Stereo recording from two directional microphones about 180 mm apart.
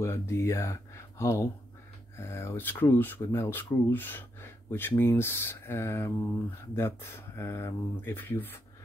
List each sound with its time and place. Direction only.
0.0 s speech: 15° left (ahead or behind)